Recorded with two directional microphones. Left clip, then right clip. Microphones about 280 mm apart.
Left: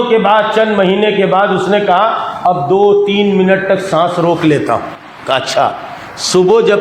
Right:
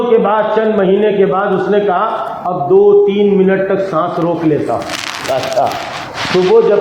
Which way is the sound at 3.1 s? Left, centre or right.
Left.